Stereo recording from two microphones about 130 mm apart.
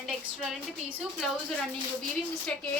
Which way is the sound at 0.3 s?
5° right (ahead or behind).